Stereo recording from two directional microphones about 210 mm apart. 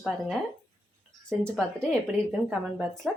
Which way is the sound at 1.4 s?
5° left (ahead or behind).